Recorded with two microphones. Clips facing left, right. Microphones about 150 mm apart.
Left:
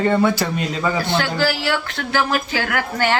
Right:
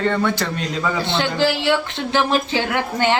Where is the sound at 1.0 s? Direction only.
25° right (ahead or behind).